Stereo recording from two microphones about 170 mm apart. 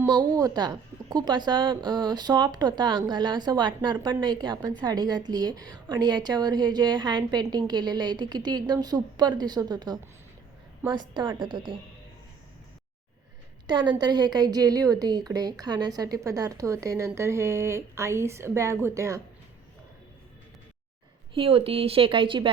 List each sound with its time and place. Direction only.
0.0 s a woman's voice: 25° right (ahead or behind)
13.7 s a woman's voice: 25° right (ahead or behind)
21.3 s speech: 35° right (ahead or behind)